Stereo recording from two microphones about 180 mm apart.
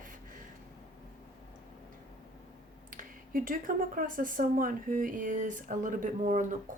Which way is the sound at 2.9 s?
50° right (ahead or behind).